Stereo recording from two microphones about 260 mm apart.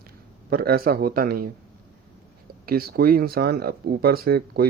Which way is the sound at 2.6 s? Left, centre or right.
Right.